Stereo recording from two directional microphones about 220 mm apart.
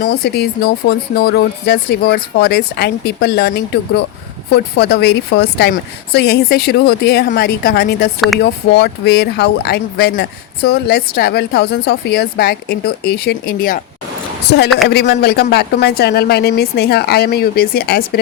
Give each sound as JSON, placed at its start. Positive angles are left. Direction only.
{"t": 0.0, "sound": "speech", "side_deg": 50}
{"t": 14.8, "sound": "speech", "side_deg": 50}